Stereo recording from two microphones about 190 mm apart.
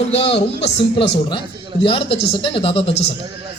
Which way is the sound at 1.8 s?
30° left (ahead or behind).